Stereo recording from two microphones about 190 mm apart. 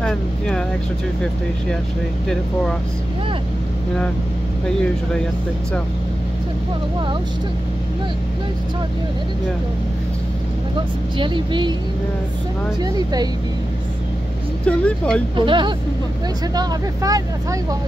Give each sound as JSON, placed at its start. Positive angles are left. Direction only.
{"t": 0.0, "sound": "speech", "side_deg": 5}
{"t": 11.1, "sound": "speech", "side_deg": -25}
{"t": 12.8, "sound": "speech", "side_deg": -20}
{"t": 14.6, "sound": "speech", "side_deg": 5}
{"t": 15.3, "sound": "speech", "side_deg": -25}